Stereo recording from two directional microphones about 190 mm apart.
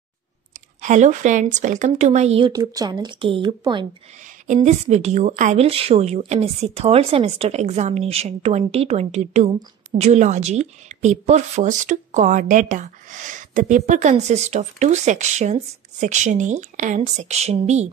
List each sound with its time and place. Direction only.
0.8 s a woman's voice: 40° right (ahead or behind)
4.6 s a woman's voice: 35° right (ahead or behind)